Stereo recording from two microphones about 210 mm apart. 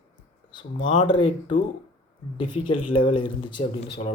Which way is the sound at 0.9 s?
20° left (ahead or behind).